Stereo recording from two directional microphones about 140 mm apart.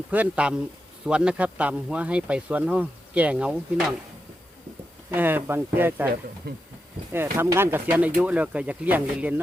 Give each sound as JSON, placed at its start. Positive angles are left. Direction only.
{"t": 0.1, "sound": "speech", "side_deg": -10}
{"t": 5.1, "sound": "speech", "side_deg": -15}
{"t": 7.1, "sound": "speech", "side_deg": -15}